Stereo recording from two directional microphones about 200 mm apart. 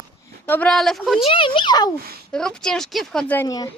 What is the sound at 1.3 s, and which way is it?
Speech, 25° left (ahead or behind).